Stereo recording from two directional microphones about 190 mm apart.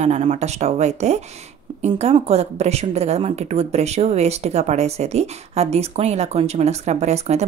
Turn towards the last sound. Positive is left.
turn(degrees=-35)  # may be behind; listen again after turning